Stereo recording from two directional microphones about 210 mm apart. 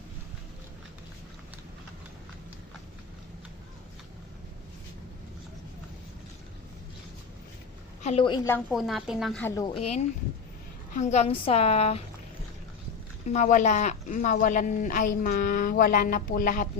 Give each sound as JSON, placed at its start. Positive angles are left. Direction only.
{"t": 8.0, "sound": "a woman's voice", "side_deg": 25}
{"t": 8.7, "sound": "a woman's voice", "side_deg": 0}
{"t": 9.4, "sound": "a woman's voice", "side_deg": 15}
{"t": 9.7, "sound": "a woman's voice", "side_deg": 30}
{"t": 13.2, "sound": "speech", "side_deg": 35}